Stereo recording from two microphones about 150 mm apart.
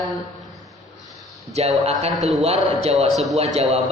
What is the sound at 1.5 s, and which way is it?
Speech, 45° right (ahead or behind).